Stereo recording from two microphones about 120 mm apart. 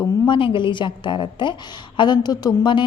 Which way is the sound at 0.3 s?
45° left (ahead or behind).